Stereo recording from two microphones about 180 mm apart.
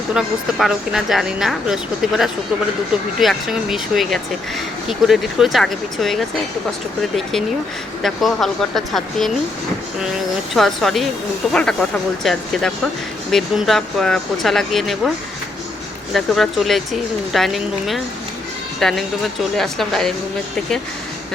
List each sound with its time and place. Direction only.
0.1 s speech: 5° right (ahead or behind)
8.0 s speech: centre (ahead or behind)
10.5 s speech: centre (ahead or behind)
16.1 s speech: centre (ahead or behind)